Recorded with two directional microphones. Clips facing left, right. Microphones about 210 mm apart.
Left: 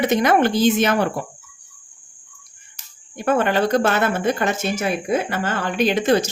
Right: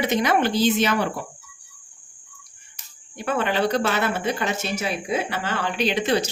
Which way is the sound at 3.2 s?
50° left (ahead or behind).